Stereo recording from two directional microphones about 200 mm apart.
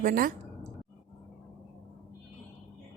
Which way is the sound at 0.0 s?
45° right (ahead or behind).